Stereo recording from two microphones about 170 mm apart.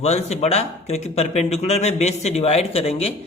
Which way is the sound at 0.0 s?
40° left (ahead or behind).